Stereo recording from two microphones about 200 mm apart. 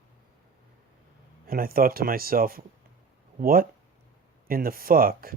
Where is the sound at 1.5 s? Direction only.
45° right (ahead or behind).